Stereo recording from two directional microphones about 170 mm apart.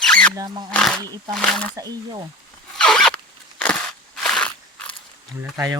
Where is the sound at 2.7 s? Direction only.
5° left (ahead or behind).